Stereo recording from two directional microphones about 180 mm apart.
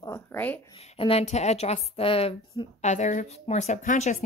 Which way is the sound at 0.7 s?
30° left (ahead or behind).